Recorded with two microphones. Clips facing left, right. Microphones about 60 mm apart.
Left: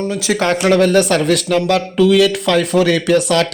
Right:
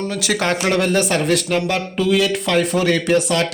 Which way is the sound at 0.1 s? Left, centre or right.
Left.